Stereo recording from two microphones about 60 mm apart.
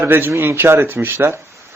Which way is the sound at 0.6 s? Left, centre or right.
Right.